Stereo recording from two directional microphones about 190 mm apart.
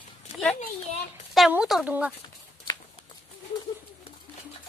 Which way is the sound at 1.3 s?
5° right (ahead or behind).